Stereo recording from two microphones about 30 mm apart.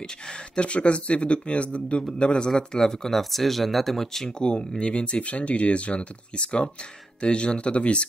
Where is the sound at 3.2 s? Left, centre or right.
Centre.